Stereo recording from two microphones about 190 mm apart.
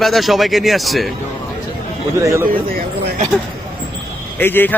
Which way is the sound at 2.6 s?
50° right (ahead or behind).